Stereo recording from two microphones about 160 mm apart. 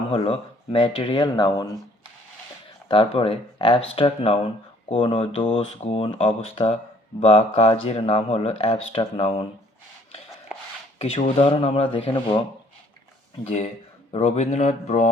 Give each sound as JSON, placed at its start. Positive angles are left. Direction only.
{"t": 0.1, "sound": "speech", "side_deg": 35}
{"t": 2.9, "sound": "speech", "side_deg": 35}
{"t": 10.9, "sound": "speech", "side_deg": 40}
{"t": 13.4, "sound": "speech", "side_deg": 45}